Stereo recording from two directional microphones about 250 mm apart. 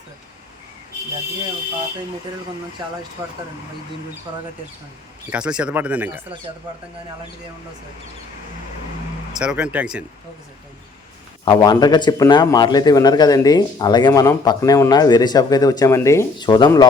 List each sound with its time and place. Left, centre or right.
5.3 s speech: centre
9.3 s speech: centre
11.4 s a man's voice: centre